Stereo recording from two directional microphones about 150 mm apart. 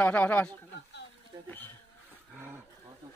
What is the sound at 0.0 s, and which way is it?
Speech, 10° left (ahead or behind).